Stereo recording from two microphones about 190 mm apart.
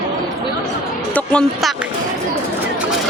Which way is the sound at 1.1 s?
5° left (ahead or behind).